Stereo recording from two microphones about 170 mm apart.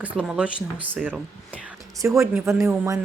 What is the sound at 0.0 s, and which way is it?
Speech, 10° right (ahead or behind).